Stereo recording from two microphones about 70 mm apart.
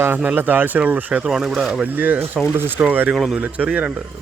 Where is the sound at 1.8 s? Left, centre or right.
Right.